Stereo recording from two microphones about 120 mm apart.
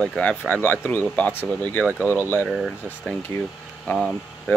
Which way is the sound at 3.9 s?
Centre (ahead or behind).